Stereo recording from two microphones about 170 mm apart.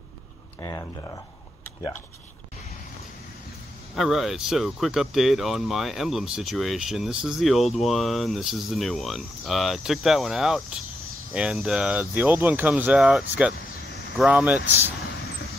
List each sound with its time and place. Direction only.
0.6 s speech: 20° left (ahead or behind)
3.9 s speech: centre (ahead or behind)